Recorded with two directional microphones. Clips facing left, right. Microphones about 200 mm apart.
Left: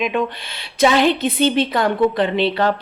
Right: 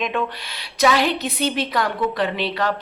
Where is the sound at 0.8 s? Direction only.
25° left (ahead or behind).